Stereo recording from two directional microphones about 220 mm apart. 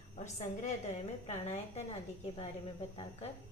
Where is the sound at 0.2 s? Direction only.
30° left (ahead or behind).